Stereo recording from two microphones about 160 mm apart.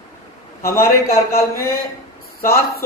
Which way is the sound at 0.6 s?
15° left (ahead or behind).